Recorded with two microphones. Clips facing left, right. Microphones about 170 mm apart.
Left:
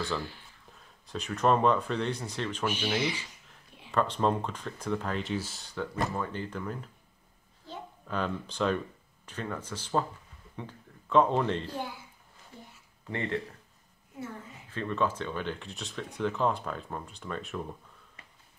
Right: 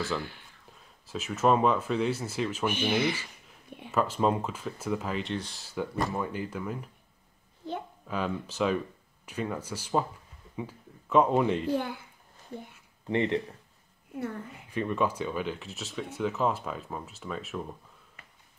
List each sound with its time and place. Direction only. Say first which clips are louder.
1.0 s speech: right 1 dB; 5° right (ahead or behind)
2.7 s speech: right 4 dB; 55° right (ahead or behind)
3.9 s speech: right 1 dB; 5° right (ahead or behind)
8.1 s speech: right 1 dB; 5° right (ahead or behind)
11.8 s a child's voice: right 3 dB; 60° right (ahead or behind)
13.1 s speech: right 6 dB; 20° right (ahead or behind)
14.7 s speech: right 2 dB; 15° right (ahead or behind)